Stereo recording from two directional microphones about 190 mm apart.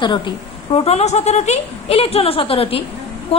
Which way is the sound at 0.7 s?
35° left (ahead or behind).